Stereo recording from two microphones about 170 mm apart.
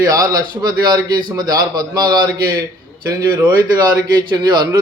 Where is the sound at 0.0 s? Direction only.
20° right (ahead or behind).